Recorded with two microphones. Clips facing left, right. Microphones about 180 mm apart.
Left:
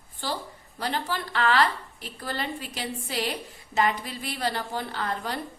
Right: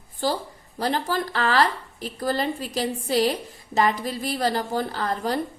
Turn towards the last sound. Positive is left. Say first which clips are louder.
# right 5 dB
turn(degrees=-40)  # may be behind; listen again after turning